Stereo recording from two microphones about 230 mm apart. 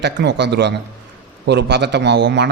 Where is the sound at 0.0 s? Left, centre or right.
Right.